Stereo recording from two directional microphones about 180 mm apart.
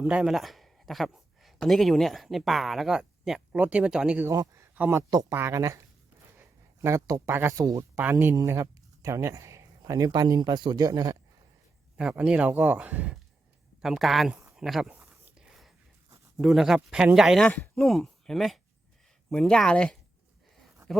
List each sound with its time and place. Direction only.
0.0 s speech: 5° right (ahead or behind)
4.3 s speech: 15° right (ahead or behind)
11.9 s speech: 5° right (ahead or behind)
15.1 s a sound: 5° right (ahead or behind)
16.4 s speech: centre (ahead or behind)
20.8 s a sound: 15° right (ahead or behind)